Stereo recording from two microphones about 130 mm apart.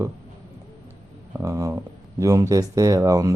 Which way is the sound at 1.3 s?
25° right (ahead or behind).